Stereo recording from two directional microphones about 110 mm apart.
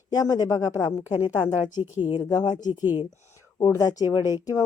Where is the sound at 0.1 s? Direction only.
35° left (ahead or behind).